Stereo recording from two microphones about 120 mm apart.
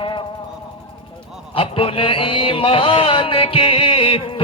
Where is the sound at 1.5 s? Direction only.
50° left (ahead or behind).